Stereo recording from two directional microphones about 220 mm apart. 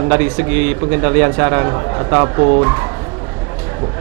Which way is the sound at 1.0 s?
20° right (ahead or behind).